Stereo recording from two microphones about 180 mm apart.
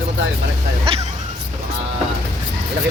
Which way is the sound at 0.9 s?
30° right (ahead or behind).